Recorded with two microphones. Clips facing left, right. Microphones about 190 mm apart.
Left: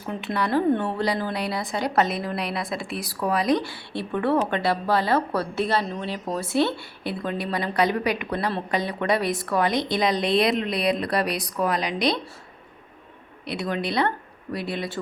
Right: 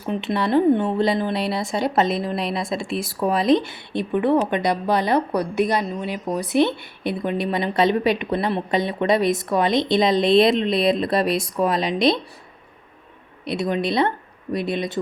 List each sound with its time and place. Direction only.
0.0 s a woman's voice: 25° right (ahead or behind)
13.4 s a woman's voice: 20° right (ahead or behind)